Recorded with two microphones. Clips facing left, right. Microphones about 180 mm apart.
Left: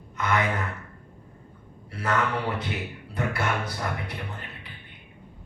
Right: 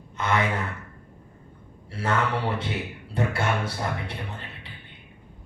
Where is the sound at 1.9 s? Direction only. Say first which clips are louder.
Right 1 dB; 30° right (ahead or behind).